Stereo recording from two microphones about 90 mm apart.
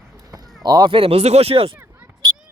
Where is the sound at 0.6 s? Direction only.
55° right (ahead or behind).